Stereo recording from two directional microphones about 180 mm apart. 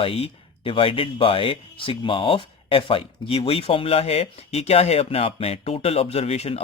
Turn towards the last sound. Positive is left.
turn(degrees=35)  # may be behind; listen again after turning